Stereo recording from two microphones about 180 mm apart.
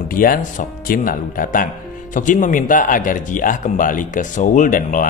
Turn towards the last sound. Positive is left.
turn(degrees=50)  # may be behind; listen again after turning